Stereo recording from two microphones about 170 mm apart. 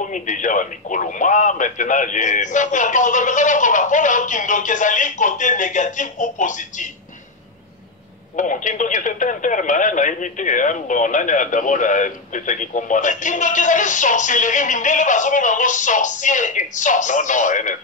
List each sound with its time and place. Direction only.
0.1 s speech: 50° left (ahead or behind)
8.4 s speech: 50° left (ahead or behind)